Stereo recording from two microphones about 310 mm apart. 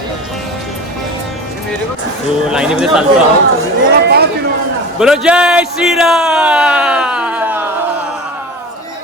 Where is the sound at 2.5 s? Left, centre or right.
Centre.